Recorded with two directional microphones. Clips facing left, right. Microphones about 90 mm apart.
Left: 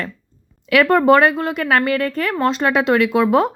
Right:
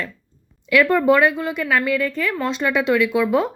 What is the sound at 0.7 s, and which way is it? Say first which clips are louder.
Speech: left 3 dB; 70° left (ahead or behind).